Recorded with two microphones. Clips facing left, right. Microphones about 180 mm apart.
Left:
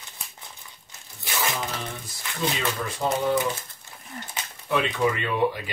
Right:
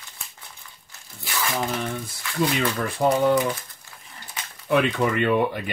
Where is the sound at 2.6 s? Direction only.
55° right (ahead or behind).